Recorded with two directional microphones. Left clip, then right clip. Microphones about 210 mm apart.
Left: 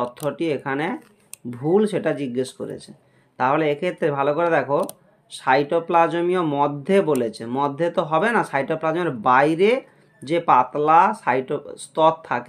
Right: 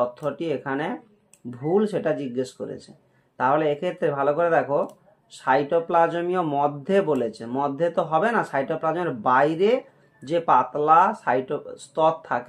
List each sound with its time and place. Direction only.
0.0 s speech: 30° left (ahead or behind)